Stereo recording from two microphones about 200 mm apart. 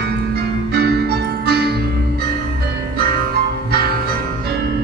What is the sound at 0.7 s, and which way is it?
Music, 50° right (ahead or behind).